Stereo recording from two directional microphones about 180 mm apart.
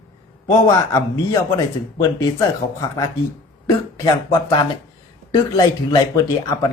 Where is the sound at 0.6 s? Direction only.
15° left (ahead or behind).